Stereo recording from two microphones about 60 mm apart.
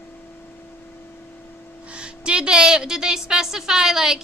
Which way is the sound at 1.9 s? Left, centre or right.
Centre.